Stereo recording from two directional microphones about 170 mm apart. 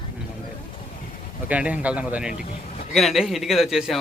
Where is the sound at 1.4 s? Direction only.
10° right (ahead or behind).